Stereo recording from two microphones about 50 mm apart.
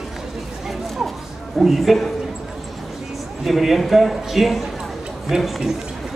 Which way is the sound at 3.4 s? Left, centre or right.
Centre.